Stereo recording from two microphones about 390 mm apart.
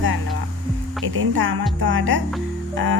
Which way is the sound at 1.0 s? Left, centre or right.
Right.